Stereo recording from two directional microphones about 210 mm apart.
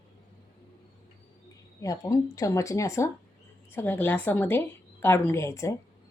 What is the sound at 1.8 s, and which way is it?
A woman's voice, 15° left (ahead or behind).